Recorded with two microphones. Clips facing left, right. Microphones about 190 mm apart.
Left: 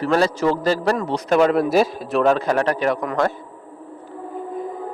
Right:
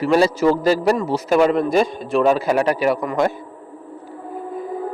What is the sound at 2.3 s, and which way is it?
Speech, 10° right (ahead or behind).